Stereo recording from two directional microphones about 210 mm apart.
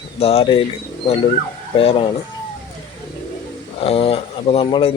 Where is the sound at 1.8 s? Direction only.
25° left (ahead or behind).